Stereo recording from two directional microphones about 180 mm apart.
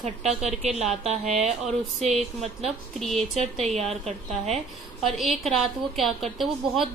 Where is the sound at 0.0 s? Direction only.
35° right (ahead or behind).